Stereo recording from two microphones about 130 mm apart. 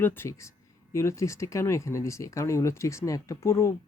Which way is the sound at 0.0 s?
15° left (ahead or behind).